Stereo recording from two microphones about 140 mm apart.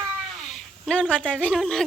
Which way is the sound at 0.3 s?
Centre (ahead or behind).